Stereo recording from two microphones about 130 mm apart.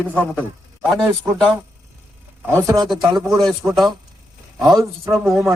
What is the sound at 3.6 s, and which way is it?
Speech, 25° right (ahead or behind).